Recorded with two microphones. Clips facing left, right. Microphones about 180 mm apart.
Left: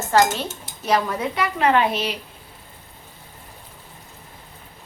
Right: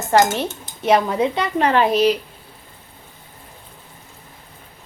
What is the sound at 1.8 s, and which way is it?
Speech, 40° right (ahead or behind).